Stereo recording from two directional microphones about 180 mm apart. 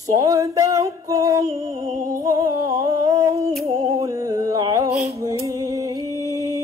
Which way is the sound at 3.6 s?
20° right (ahead or behind).